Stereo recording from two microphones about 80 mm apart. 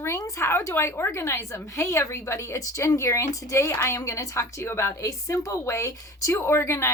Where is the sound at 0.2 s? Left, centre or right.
Left.